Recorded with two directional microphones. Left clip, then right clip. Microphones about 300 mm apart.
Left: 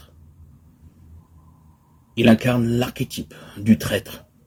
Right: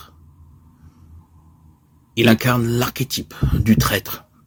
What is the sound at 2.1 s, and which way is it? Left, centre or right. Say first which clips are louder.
Speech: right 1 dB; right.